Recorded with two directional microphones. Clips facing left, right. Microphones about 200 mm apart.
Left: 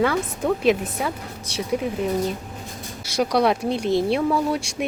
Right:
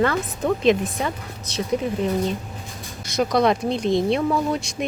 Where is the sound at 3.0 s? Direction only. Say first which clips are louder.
Right 1 dB; 10° left (ahead or behind).